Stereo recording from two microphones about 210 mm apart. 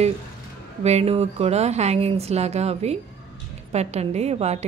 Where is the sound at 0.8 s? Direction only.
30° right (ahead or behind).